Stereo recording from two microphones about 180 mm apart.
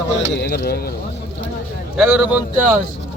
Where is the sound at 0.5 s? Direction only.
60° left (ahead or behind).